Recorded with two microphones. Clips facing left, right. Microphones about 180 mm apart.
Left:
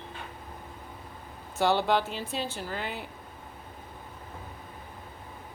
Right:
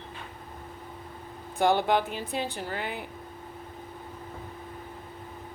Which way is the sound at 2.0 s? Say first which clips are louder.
Right 2 dB; 55° right (ahead or behind).